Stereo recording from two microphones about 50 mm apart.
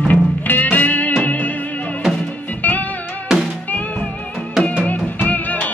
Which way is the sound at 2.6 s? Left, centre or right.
Left.